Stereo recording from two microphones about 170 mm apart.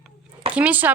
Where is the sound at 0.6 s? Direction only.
10° right (ahead or behind).